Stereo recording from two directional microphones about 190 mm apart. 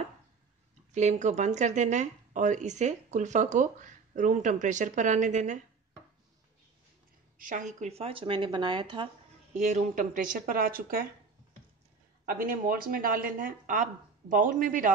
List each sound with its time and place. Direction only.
0.9 s speech: 40° right (ahead or behind)
7.3 s speech: 45° right (ahead or behind)
12.3 s speech: 50° right (ahead or behind)